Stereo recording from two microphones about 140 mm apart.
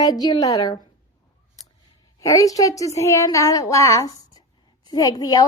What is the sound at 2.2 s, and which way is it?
A woman's voice, 25° left (ahead or behind).